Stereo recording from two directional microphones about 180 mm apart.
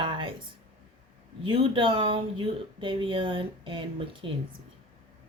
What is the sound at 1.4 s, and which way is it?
Speech, 25° right (ahead or behind).